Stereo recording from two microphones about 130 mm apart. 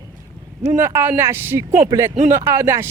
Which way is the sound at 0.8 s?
15° right (ahead or behind).